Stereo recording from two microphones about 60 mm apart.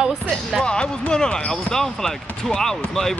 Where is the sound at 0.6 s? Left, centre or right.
Centre.